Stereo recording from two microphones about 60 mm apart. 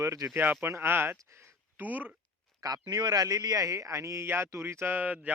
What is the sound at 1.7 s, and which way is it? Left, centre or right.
Speech, right.